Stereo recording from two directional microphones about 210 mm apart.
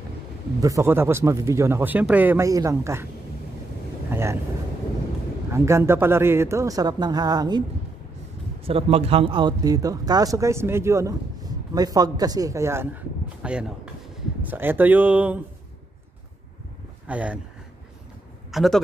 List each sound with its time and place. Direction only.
0.6 s speech: 15° right (ahead or behind)
4.1 s vehicle: 10° right (ahead or behind)
5.5 s speech: 10° right (ahead or behind)
8.6 s speech: 25° right (ahead or behind); by 15.4 s 5° right (ahead or behind)
17.1 s speech: 5° right (ahead or behind)
18.5 s speech: centre (ahead or behind)